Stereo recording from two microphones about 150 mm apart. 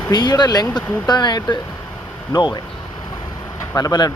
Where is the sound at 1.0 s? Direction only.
30° left (ahead or behind).